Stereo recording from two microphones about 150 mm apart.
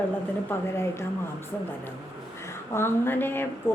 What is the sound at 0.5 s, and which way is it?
Speech, 15° left (ahead or behind).